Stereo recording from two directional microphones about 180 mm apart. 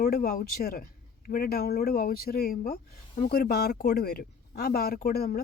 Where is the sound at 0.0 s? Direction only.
55° left (ahead or behind).